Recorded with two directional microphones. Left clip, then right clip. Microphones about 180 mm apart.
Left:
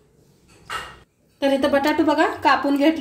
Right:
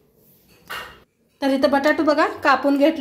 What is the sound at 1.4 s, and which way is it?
Speech, 35° right (ahead or behind).